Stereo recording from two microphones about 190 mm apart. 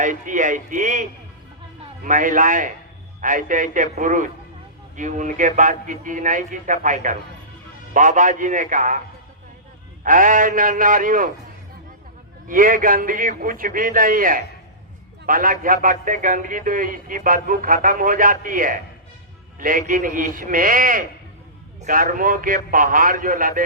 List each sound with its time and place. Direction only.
0.0 s speech: 40° right (ahead or behind)
2.0 s speech: 45° right (ahead or behind)
10.0 s speech: 45° right (ahead or behind)
12.5 s a man's voice: 45° right (ahead or behind)